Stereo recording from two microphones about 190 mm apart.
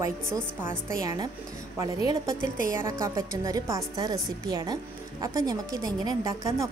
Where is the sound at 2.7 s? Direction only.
15° right (ahead or behind).